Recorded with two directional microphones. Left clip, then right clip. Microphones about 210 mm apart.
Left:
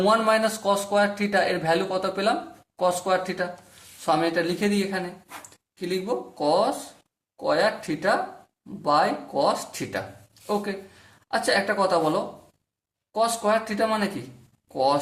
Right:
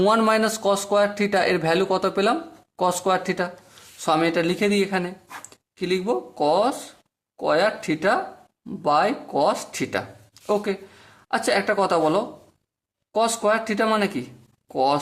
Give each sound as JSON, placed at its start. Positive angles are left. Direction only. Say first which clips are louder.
{"t": 0.0, "sound": "a man's voice", "louder": "right 1 dB", "side_deg": -40}
{"t": 11.3, "sound": "speech", "louder": "right 2 dB", "side_deg": -45}